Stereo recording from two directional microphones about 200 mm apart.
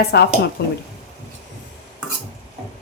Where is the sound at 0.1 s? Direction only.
55° left (ahead or behind).